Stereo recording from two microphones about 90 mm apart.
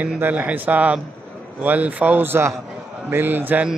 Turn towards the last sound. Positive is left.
turn(degrees=-20)  # may be behind; listen again after turning